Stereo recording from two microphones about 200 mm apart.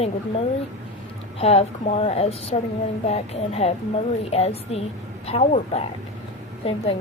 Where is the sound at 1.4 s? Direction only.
30° left (ahead or behind).